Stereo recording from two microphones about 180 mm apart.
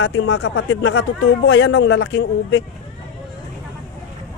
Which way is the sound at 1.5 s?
70° left (ahead or behind).